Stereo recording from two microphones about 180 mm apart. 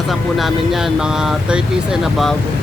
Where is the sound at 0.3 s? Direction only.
Centre (ahead or behind).